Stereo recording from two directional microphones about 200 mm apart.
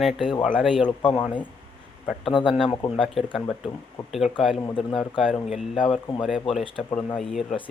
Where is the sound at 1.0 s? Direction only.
25° left (ahead or behind).